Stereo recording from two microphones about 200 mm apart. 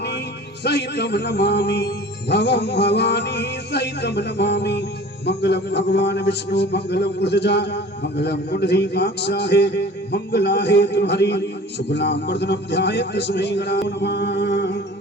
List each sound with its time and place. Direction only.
0.6 s a man's voice: 55° left (ahead or behind)